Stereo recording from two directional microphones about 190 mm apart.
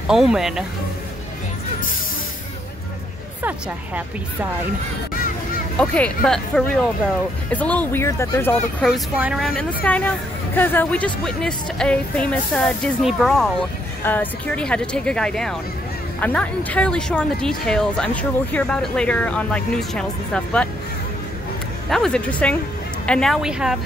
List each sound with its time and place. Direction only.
0.1 s speech: centre (ahead or behind)
3.4 s speech: 10° right (ahead or behind)
5.8 s speech: 5° left (ahead or behind)
8.8 s speech: 5° right (ahead or behind)
9.8 s speech: 5° left (ahead or behind)
21.8 s speech: centre (ahead or behind)